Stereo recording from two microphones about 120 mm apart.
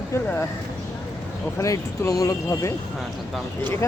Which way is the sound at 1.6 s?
25° left (ahead or behind).